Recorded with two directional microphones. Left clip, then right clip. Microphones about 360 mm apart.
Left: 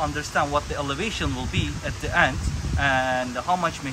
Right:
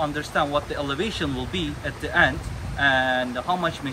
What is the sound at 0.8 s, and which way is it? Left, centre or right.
Speech, left.